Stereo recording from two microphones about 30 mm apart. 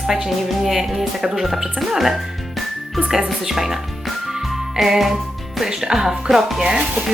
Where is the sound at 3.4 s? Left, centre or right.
Centre.